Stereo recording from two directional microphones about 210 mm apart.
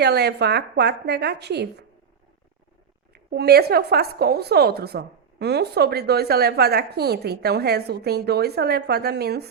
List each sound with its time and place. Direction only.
0.0 s a woman's voice: 50° right (ahead or behind)
3.2 s a woman's voice: 50° right (ahead or behind)